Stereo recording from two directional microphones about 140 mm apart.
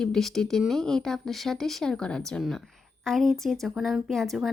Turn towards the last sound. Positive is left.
turn(degrees=0)  # may be behind; listen again after turning